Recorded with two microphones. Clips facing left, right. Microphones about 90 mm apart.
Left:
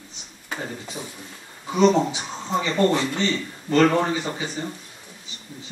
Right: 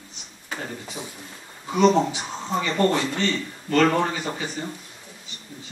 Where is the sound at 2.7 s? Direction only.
20° left (ahead or behind).